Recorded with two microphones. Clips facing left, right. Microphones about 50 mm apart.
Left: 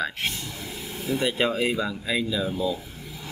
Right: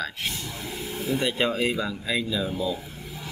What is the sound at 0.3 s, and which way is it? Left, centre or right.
Vehicle, right.